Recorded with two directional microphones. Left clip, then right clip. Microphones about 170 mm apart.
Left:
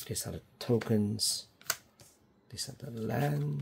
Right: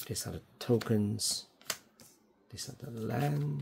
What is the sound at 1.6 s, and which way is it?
Typewriter, 20° left (ahead or behind).